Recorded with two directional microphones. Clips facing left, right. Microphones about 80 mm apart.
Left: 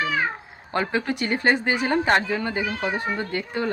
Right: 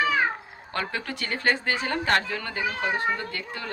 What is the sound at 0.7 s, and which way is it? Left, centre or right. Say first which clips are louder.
Speech: left 6 dB; left.